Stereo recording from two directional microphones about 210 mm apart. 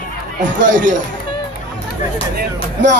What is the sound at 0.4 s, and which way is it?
Speech, 40° right (ahead or behind).